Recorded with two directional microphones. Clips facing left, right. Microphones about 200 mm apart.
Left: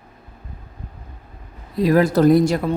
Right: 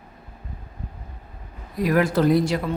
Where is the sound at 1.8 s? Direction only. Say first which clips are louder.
Left 5 dB; 35° left (ahead or behind).